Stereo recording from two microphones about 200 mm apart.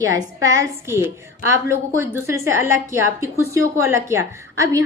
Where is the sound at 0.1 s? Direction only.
15° right (ahead or behind).